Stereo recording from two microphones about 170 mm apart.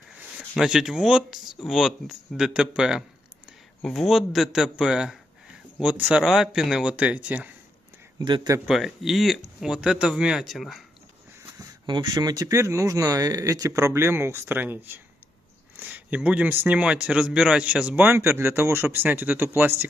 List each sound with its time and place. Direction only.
0.3 s a man's voice: 5° right (ahead or behind)
8.2 s speech: 25° right (ahead or behind)
8.6 s speech: centre (ahead or behind)
11.9 s a man's voice: 25° right (ahead or behind)